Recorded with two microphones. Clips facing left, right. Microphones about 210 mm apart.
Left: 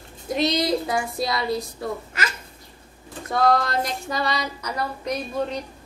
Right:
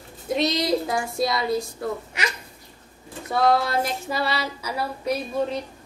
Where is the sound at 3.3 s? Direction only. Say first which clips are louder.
Even; 5° right (ahead or behind).